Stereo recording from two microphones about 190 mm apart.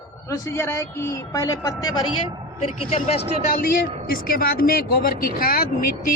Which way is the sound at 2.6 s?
30° left (ahead or behind).